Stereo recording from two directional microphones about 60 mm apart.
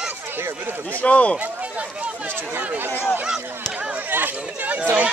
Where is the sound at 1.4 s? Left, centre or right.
Right.